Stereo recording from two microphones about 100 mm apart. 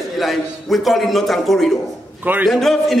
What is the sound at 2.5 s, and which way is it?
Speech, centre (ahead or behind).